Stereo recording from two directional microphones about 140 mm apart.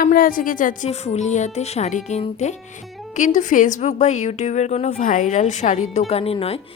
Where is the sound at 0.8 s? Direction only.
50° left (ahead or behind).